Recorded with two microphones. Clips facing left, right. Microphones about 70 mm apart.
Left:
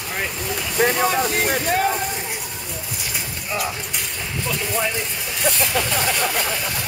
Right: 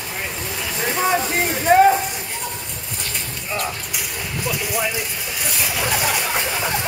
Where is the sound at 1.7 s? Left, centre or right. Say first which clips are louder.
Right 11 dB; right.